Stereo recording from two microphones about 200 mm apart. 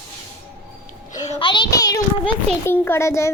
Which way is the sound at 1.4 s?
25° left (ahead or behind).